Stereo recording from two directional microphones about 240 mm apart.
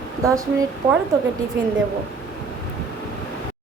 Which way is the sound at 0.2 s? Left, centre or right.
Centre.